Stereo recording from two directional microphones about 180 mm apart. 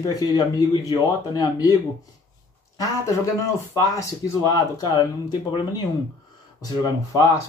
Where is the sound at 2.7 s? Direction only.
15° left (ahead or behind).